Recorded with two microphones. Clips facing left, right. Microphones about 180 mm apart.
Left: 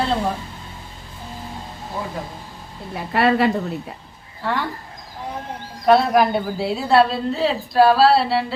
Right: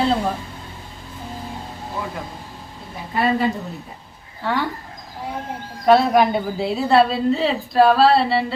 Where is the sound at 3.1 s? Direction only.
75° left (ahead or behind).